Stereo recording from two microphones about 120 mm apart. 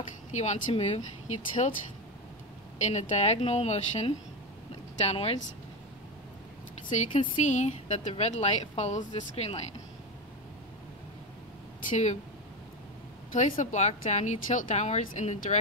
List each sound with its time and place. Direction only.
0.3 s speech: 70° left (ahead or behind)
2.8 s speech: 70° left (ahead or behind)
7.1 s speech: 45° left (ahead or behind)
7.4 s speech: 75° left (ahead or behind)
8.1 s speech: 60° left (ahead or behind)
13.3 s speech: 90° left; by 15.5 s 75° left (ahead or behind)